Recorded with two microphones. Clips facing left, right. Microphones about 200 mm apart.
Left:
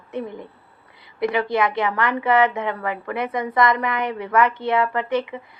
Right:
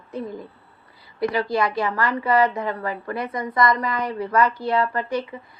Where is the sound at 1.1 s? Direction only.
20° left (ahead or behind).